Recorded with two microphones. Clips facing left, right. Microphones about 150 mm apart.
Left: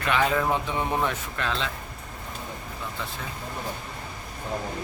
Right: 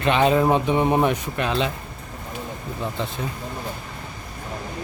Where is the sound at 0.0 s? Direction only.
20° right (ahead or behind).